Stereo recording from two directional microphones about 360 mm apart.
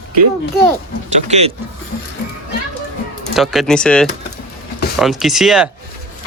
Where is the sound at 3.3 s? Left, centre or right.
Centre.